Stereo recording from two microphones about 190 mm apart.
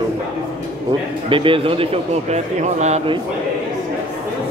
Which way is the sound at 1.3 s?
25° right (ahead or behind).